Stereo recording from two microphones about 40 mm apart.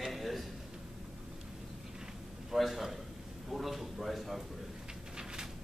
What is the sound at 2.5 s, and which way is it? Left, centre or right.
Speech, centre.